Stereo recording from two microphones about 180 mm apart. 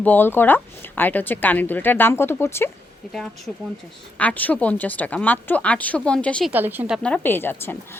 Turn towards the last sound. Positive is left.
turn(degrees=10)  # may be behind; listen again after turning